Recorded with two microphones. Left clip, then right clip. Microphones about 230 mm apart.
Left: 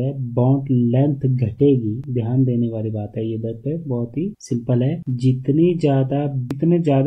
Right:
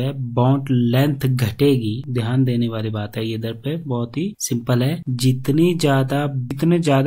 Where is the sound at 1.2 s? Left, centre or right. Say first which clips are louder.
Even; right.